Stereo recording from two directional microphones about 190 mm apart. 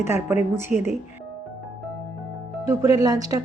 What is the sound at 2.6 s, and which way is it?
Speech, 15° right (ahead or behind).